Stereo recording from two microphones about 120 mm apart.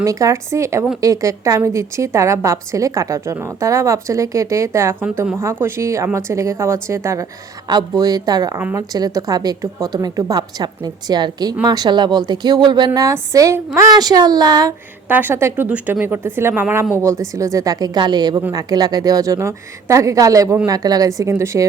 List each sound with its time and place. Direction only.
0.0 s a woman's voice: 25° right (ahead or behind)
8.5 s a woman's voice: 20° right (ahead or behind)
15.1 s a woman's voice: 15° right (ahead or behind)